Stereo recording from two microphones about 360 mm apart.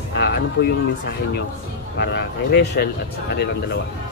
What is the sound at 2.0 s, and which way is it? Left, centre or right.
Speech, left.